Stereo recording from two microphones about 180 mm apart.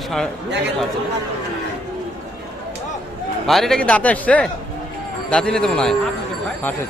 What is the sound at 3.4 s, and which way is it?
Speech, centre (ahead or behind).